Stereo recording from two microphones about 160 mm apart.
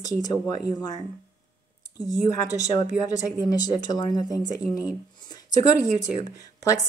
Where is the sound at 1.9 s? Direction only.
25° left (ahead or behind).